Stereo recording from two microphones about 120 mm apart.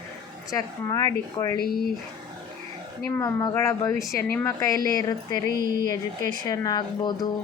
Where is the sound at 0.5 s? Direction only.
30° left (ahead or behind).